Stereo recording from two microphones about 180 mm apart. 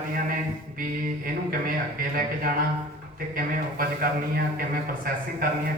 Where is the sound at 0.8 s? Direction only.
50° right (ahead or behind).